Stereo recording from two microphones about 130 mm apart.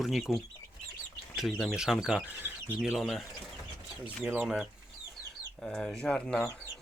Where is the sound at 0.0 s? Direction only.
Centre (ahead or behind).